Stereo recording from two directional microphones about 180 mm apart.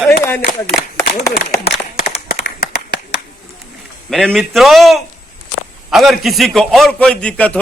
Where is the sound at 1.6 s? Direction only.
60° left (ahead or behind).